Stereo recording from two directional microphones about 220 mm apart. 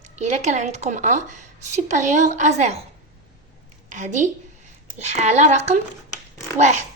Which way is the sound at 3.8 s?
35° right (ahead or behind).